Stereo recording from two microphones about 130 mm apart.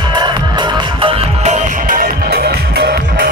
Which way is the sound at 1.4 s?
80° right.